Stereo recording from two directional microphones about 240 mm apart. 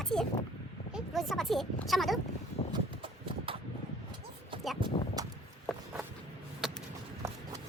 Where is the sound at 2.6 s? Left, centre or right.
Left.